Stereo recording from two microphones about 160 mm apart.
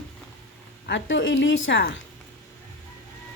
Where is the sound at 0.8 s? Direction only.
90° left.